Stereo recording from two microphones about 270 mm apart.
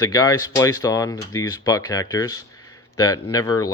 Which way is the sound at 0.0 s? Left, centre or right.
Centre.